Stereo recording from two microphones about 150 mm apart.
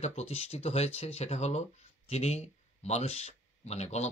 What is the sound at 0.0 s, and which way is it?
Speech, 45° left (ahead or behind).